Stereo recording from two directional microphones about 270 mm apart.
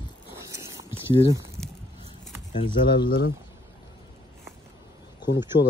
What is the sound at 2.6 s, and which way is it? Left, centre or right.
Speech, centre.